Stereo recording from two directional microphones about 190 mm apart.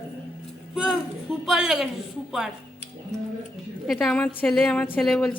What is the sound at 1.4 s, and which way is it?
A woman's voice, centre (ahead or behind).